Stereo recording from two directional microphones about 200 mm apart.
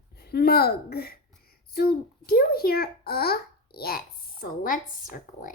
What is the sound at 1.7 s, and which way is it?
A child's voice, 50° left (ahead or behind).